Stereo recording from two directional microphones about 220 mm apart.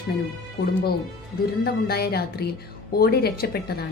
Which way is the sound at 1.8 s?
45° left (ahead or behind).